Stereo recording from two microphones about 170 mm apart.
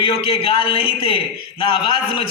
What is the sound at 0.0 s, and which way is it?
A man's voice, 35° left (ahead or behind).